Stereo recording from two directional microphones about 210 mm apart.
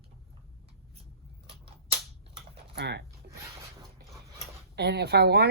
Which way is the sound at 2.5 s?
50° right (ahead or behind).